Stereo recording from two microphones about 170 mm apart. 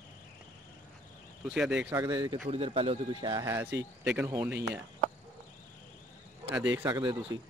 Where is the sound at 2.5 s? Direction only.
35° right (ahead or behind); by 4.6 s 15° right (ahead or behind).